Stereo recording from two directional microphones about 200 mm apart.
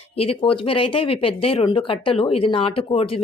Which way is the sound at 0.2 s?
30° left (ahead or behind).